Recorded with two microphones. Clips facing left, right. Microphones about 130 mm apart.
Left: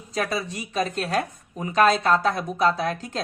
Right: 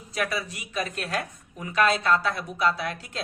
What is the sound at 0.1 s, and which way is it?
Speech, 35° left (ahead or behind).